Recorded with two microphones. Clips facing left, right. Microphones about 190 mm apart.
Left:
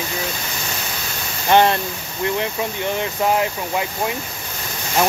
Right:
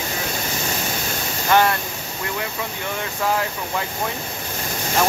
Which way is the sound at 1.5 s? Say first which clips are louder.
Left 3 dB; 25° left (ahead or behind).